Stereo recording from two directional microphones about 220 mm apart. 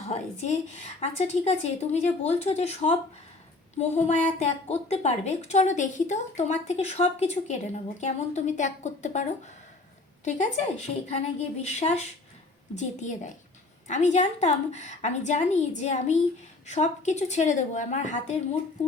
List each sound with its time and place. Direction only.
0.9 s a woman's voice: 30° left (ahead or behind)
10.2 s a woman's voice: 35° left (ahead or behind)